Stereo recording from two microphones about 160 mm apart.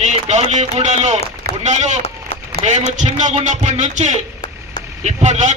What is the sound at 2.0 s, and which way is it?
Run, 40° left (ahead or behind).